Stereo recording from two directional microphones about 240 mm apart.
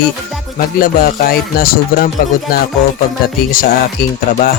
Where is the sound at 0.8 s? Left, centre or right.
Left.